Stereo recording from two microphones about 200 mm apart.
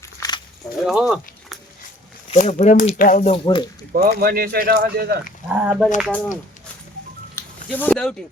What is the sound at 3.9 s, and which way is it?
Speech, 45° right (ahead or behind).